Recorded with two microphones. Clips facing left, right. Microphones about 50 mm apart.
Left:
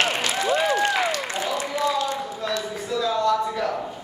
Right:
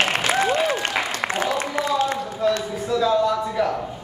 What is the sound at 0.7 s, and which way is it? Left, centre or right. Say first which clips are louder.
Applause: left 2 dB; right.